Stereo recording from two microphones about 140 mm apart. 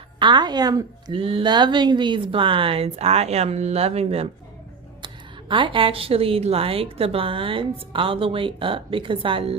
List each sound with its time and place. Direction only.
0.2 s speech: 30° right (ahead or behind)
5.0 s speech: 35° right (ahead or behind)